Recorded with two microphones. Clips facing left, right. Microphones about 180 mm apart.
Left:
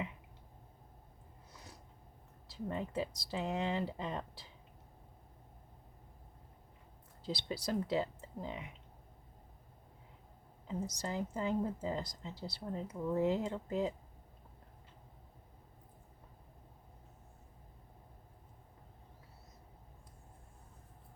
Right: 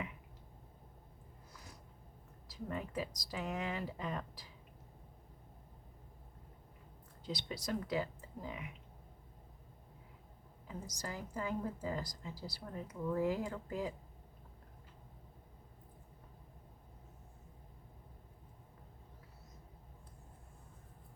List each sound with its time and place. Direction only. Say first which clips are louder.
2.5 s a woman's voice: left 3 dB; 25° left (ahead or behind)
7.3 s a woman's voice: left 2 dB; 30° left (ahead or behind)
10.7 s a woman's voice: left 6 dB; 25° left (ahead or behind)